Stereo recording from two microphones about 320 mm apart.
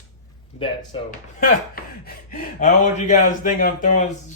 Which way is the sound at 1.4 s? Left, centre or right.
Left.